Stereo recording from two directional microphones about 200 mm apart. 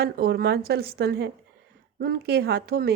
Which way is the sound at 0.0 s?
50° right (ahead or behind).